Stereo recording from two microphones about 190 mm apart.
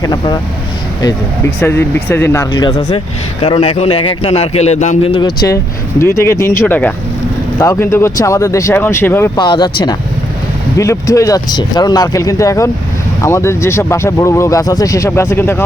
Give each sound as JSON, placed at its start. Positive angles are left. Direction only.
{"t": 0.0, "sound": "speech", "side_deg": 20}
{"t": 1.6, "sound": "a man's voice", "side_deg": 10}
{"t": 9.4, "sound": "speech", "side_deg": 25}